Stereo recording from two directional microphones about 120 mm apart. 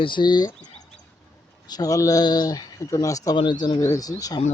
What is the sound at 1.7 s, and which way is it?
Speech, 30° left (ahead or behind).